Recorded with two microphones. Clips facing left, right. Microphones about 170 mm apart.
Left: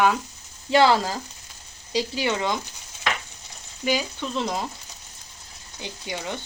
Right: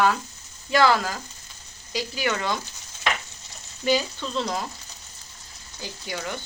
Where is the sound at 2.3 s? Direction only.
15° left (ahead or behind).